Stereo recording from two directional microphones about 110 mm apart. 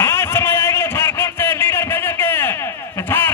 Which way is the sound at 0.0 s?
25° left (ahead or behind).